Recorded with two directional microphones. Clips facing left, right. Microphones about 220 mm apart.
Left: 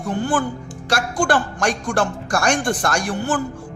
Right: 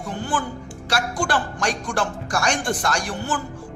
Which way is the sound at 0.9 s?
50° left (ahead or behind).